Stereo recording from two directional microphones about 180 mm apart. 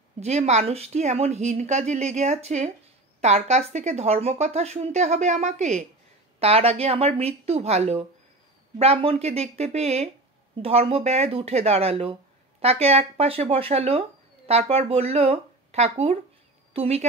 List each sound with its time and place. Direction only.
0.2 s a woman's voice: 40° right (ahead or behind)